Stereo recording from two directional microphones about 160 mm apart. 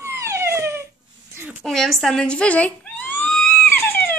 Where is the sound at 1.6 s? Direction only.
Centre (ahead or behind).